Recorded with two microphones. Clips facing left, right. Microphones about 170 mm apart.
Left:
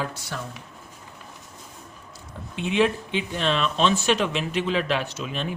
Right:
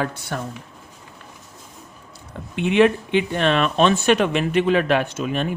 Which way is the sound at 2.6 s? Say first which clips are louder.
Right 6 dB; 60° right (ahead or behind).